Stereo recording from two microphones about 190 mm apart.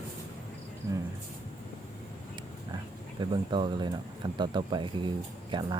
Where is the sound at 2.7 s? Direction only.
25° right (ahead or behind).